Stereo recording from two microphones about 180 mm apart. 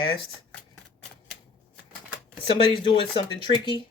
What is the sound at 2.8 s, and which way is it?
Speech, 30° left (ahead or behind).